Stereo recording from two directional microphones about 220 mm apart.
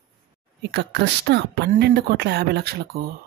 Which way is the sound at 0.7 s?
50° right (ahead or behind).